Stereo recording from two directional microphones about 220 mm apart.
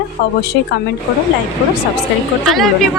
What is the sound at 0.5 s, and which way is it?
Speech, 50° left (ahead or behind).